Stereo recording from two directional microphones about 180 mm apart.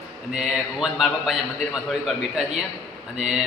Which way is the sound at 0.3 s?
5° right (ahead or behind).